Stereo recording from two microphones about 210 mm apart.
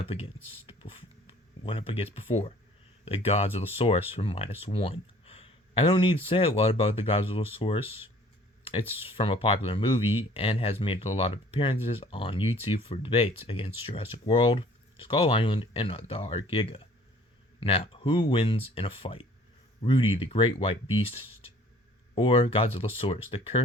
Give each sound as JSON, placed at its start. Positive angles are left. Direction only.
{"t": 0.1, "sound": "speech", "side_deg": 25}
{"t": 7.9, "sound": "speech", "side_deg": -10}
{"t": 9.0, "sound": "speech", "side_deg": 25}
{"t": 10.0, "sound": "speech", "side_deg": -10}
{"t": 10.3, "sound": "speech", "side_deg": 25}
{"t": 22.1, "sound": "speech", "side_deg": 25}